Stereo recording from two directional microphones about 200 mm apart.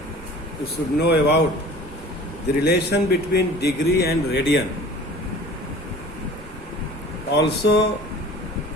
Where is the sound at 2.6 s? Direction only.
55° left (ahead or behind).